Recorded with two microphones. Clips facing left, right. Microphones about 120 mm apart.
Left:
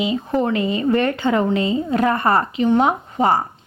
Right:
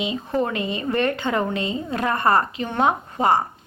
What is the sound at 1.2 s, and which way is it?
A woman's voice, 25° left (ahead or behind).